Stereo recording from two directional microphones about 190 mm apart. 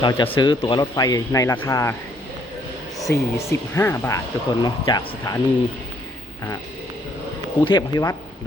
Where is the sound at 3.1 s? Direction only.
15° left (ahead or behind).